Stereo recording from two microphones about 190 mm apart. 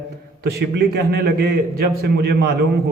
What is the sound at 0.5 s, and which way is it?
A man's voice, 55° right (ahead or behind).